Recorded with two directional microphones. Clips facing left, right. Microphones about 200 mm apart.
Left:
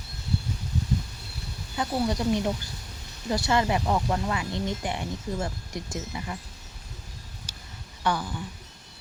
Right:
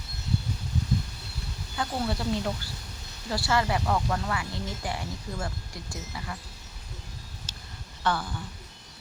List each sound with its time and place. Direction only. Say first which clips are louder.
1.7 s speech: left 3 dB; 20° left (ahead or behind)
7.5 s a sound: even; 15° left (ahead or behind)
8.0 s speech: left 1 dB; 15° left (ahead or behind)